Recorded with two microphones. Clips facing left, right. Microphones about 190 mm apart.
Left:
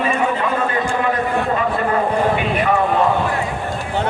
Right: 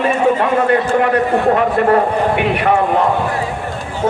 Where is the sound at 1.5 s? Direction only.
65° right (ahead or behind).